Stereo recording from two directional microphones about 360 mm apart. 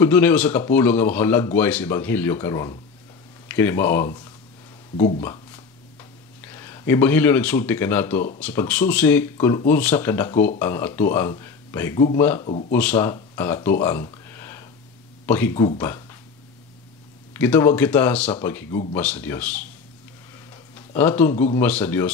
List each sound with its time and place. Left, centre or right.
0.0 s speech: centre
4.9 s speech: centre
6.4 s speech: centre
12.4 s speech: centre
12.7 s speech: centre
17.3 s speech: centre
20.7 s speech: centre